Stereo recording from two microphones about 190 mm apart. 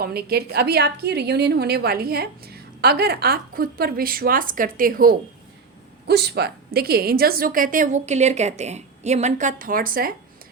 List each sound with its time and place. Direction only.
0.0 s a woman's voice: 55° right (ahead or behind)
6.1 s a woman's voice: 60° right (ahead or behind)